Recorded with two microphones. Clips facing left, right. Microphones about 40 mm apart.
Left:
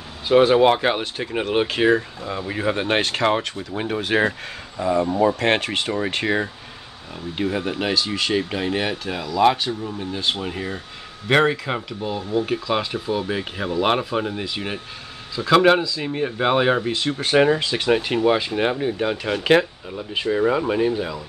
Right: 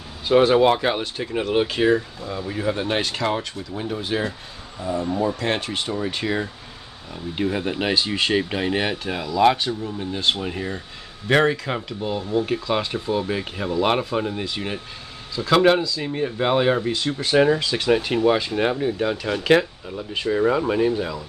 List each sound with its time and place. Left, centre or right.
0.3 s speech: centre; by 3.6 s left
3.7 s speech: left
4.7 s speech: left
5.2 s speech: left
6.2 s speech: left
7.3 s speech: centre
11.2 s speech: left
11.6 s speech: centre
16.9 s speech: left; by 21.2 s centre